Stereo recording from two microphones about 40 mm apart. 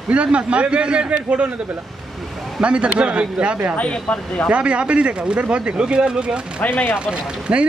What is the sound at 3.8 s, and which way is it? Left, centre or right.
Speech, left.